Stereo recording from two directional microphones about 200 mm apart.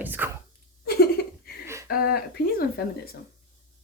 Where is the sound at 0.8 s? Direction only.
50° left (ahead or behind).